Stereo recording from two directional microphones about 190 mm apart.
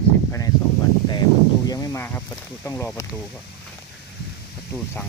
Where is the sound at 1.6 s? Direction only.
20° left (ahead or behind).